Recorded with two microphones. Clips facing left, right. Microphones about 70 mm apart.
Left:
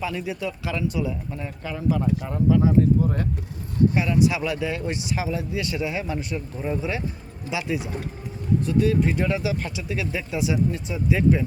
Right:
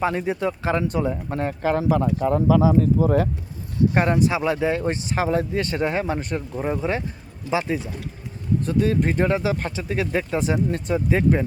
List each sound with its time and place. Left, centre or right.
0.0 s speech: right
1.3 s speech: right
2.2 s speech: right
3.9 s speech: right
4.3 s speech: right
8.6 s speech: right